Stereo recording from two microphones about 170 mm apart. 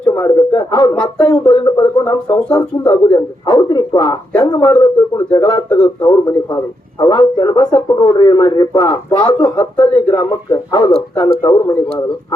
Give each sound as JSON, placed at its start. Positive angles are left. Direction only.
{"t": 0.1, "sound": "a man's voice", "side_deg": 20}
{"t": 0.9, "sound": "speech", "side_deg": 10}
{"t": 1.5, "sound": "speech", "side_deg": 25}
{"t": 5.1, "sound": "speech", "side_deg": 10}
{"t": 5.7, "sound": "speech", "side_deg": 25}
{"t": 9.6, "sound": "speech", "side_deg": 15}